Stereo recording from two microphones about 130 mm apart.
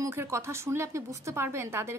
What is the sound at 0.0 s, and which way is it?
Speech, 20° right (ahead or behind).